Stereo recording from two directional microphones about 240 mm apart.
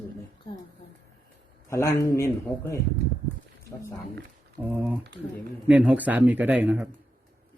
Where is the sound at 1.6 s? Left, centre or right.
Centre.